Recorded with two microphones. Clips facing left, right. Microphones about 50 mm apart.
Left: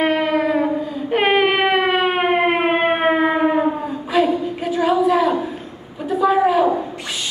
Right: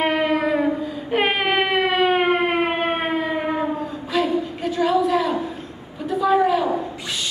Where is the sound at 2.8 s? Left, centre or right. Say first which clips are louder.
Left 5 dB; left.